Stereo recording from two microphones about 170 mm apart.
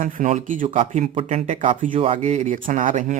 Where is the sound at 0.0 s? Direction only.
50° right (ahead or behind).